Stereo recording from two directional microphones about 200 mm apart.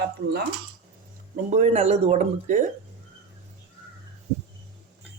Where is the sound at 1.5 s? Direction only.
35° right (ahead or behind).